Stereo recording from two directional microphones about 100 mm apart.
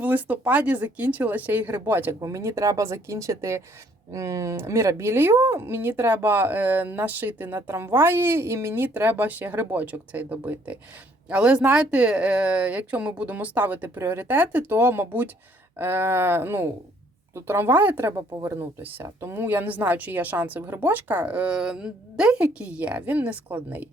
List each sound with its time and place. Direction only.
0.0 s a woman's voice: 15° right (ahead or behind)
2.2 s a woman's voice: 30° right (ahead or behind); by 23.9 s 15° right (ahead or behind)